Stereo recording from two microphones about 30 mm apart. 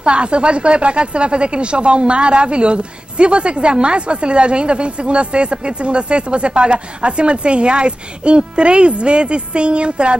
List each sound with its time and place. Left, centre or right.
0.0 s speech: right